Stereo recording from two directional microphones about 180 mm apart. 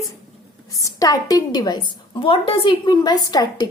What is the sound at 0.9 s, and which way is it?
A woman's voice, 20° left (ahead or behind).